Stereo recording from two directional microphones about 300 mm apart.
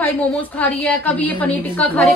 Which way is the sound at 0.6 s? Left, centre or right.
Centre.